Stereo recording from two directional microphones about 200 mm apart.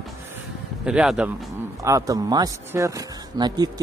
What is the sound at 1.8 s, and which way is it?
Speech, 15° right (ahead or behind).